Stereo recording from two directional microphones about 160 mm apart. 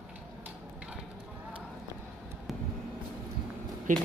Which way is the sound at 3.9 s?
55° right (ahead or behind).